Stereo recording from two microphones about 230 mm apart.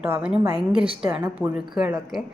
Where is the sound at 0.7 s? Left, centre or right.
Right.